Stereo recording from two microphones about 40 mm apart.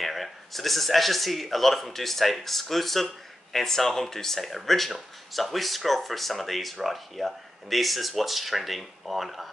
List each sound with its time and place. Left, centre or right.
0.0 s speech: centre